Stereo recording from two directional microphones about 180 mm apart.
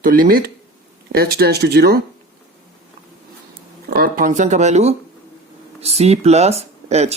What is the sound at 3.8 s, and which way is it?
Speech, 55° right (ahead or behind).